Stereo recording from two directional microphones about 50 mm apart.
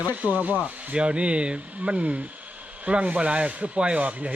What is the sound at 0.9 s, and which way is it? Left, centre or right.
Speech, right.